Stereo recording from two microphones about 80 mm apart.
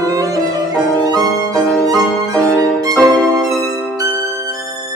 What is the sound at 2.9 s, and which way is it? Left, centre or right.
Music, centre.